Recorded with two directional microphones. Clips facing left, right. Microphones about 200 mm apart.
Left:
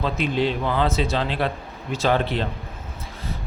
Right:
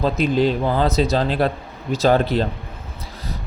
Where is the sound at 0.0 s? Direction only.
40° right (ahead or behind).